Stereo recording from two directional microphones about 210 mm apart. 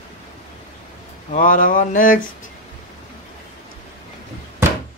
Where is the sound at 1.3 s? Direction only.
40° left (ahead or behind).